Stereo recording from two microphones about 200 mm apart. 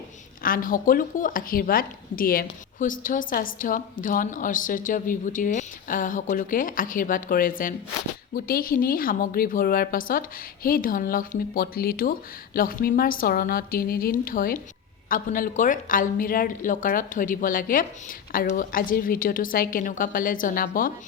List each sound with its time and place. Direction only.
0.4 s speech: 45° left (ahead or behind)